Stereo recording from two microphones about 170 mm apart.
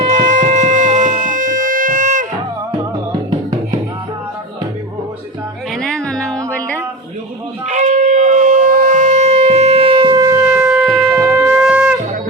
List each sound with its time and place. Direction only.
0.0 s music: 45° right (ahead or behind)
5.7 s music: 5° left (ahead or behind)
7.7 s shofar: 45° right (ahead or behind); by 11.9 s 5° right (ahead or behind)